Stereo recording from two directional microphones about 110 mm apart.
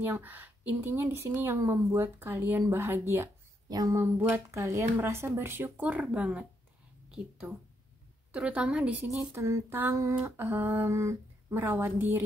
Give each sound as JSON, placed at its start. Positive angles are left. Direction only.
{"t": 0.1, "sound": "a woman's voice", "side_deg": -15}
{"t": 3.6, "sound": "a woman's voice", "side_deg": -35}